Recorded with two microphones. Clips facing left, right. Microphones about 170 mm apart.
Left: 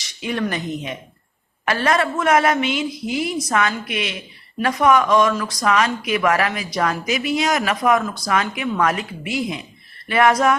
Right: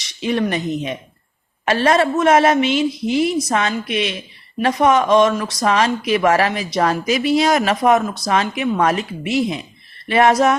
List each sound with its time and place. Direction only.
0.0 s speech: 25° right (ahead or behind)